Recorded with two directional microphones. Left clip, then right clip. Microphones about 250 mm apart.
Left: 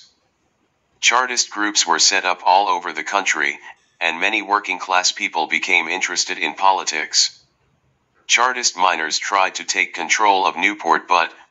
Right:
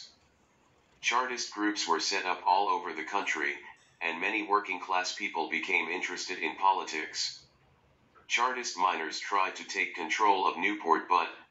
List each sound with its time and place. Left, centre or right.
1.0 s speech: left
8.3 s speech: left